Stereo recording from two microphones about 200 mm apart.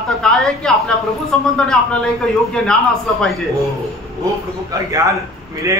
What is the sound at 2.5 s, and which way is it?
Speech, 5° left (ahead or behind).